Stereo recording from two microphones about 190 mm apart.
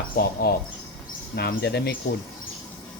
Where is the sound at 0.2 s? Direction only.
55° left (ahead or behind).